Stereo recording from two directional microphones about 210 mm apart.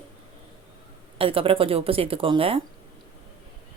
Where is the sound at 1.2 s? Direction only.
25° right (ahead or behind).